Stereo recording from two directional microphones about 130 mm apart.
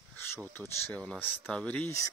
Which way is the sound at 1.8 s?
25° left (ahead or behind).